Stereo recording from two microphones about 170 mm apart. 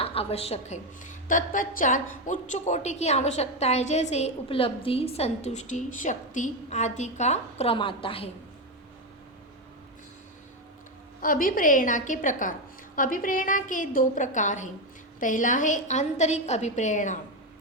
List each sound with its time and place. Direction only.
0.0 s a woman's voice: 35° left (ahead or behind)
1.3 s a woman's voice: 50° left (ahead or behind); by 8.3 s 30° left (ahead or behind)
11.2 s a woman's voice: 55° left (ahead or behind)